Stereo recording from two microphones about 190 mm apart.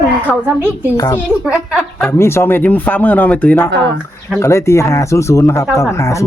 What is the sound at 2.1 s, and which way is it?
Speech, 15° left (ahead or behind).